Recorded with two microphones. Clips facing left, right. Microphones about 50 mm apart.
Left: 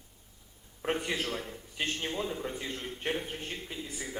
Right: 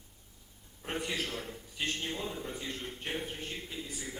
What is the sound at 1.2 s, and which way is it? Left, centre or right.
Speech, centre.